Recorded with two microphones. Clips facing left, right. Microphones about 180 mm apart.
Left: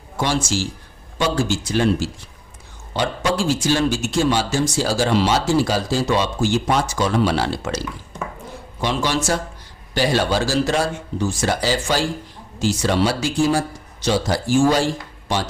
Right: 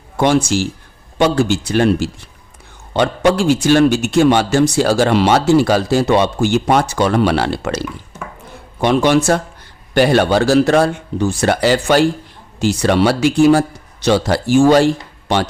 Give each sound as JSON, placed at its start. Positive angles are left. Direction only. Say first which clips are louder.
{"t": 0.2, "sound": "a man's voice", "louder": "right 8 dB", "side_deg": -60}